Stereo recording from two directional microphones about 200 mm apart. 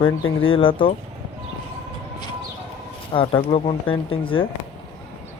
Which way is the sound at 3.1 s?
25° left (ahead or behind).